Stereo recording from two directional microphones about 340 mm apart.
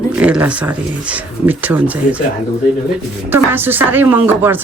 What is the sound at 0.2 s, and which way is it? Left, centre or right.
Speech, centre.